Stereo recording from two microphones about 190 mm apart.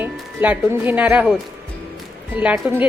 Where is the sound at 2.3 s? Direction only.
5° right (ahead or behind).